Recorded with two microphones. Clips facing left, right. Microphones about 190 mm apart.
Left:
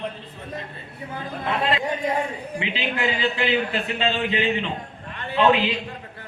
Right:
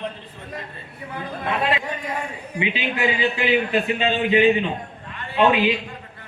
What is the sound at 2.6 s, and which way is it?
A man's voice, 15° right (ahead or behind).